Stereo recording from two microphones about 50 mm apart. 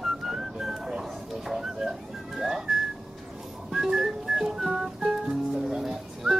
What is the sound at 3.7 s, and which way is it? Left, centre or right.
Music, centre.